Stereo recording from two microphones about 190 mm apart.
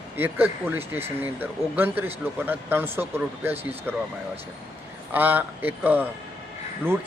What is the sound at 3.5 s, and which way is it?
Speech, 30° right (ahead or behind).